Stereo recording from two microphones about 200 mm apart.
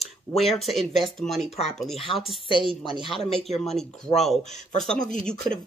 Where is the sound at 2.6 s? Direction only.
25° right (ahead or behind).